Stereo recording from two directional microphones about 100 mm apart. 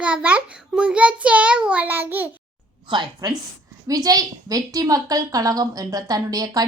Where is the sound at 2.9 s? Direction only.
45° right (ahead or behind).